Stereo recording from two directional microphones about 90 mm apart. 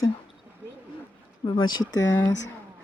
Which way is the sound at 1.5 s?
55° left (ahead or behind).